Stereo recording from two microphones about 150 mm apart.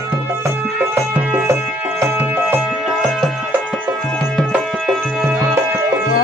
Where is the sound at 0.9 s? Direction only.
10° right (ahead or behind).